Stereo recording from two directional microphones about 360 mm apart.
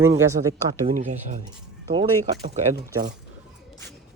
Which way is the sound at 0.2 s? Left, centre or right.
Centre.